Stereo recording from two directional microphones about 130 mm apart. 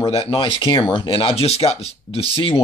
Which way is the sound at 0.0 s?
50° left (ahead or behind).